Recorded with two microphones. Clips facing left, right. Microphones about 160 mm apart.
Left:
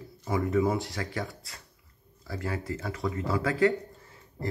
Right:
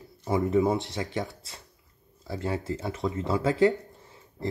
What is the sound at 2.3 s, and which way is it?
Speech, 25° right (ahead or behind).